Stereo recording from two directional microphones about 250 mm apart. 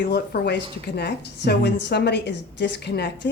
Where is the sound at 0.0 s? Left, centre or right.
Left.